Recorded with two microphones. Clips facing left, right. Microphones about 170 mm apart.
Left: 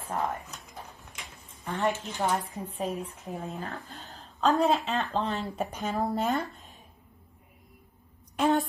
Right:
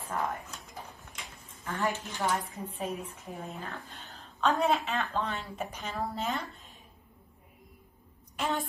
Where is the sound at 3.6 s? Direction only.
40° left (ahead or behind).